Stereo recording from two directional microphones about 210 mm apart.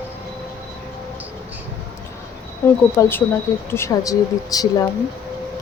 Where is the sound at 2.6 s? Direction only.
15° left (ahead or behind).